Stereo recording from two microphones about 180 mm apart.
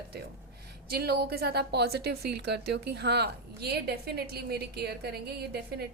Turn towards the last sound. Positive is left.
turn(degrees=-65)  # may be behind; listen again after turning